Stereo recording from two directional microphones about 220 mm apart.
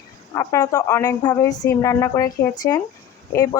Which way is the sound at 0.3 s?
15° left (ahead or behind).